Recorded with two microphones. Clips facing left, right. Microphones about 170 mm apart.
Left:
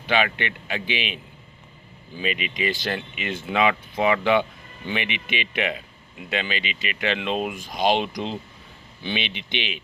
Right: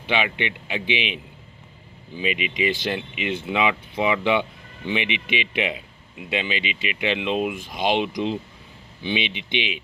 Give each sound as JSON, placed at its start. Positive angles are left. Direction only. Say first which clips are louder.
{"t": 0.2, "sound": "speech", "louder": "left 1 dB", "side_deg": -15}